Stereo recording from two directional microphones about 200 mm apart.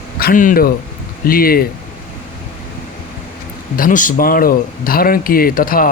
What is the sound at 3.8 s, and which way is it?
Speech, 45° left (ahead or behind).